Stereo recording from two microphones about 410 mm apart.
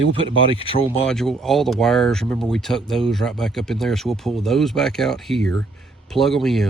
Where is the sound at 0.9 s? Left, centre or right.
Centre.